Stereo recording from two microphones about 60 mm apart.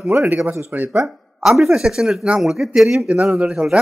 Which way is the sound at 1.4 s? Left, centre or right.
Centre.